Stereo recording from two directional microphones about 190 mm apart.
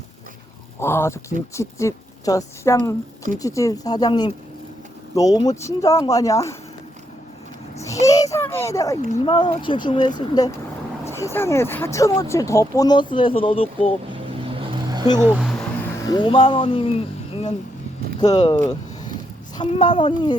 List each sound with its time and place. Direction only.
0.8 s speech: 15° left (ahead or behind)
7.8 s a sound: 15° left (ahead or behind)
9.2 s speech: 25° left (ahead or behind)
11.0 s vehicle: 15° left (ahead or behind)
11.3 s speech: 15° left (ahead or behind); by 13.9 s 30° left (ahead or behind)
14.1 s vehicle: 30° right (ahead or behind)
15.2 s a sound: 5° right (ahead or behind)
16.0 s speech: 25° left (ahead or behind)
18.2 s speech: 25° left (ahead or behind)
19.5 s speech: 25° left (ahead or behind)